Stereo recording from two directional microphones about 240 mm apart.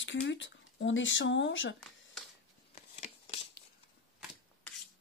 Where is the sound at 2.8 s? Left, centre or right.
Left.